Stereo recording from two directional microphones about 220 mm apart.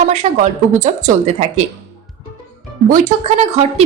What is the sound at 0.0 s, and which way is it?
A woman's voice, 30° right (ahead or behind).